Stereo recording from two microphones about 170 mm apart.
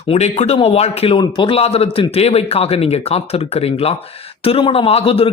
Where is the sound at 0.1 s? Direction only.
40° left (ahead or behind).